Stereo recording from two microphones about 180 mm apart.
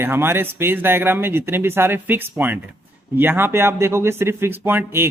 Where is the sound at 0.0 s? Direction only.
15° right (ahead or behind).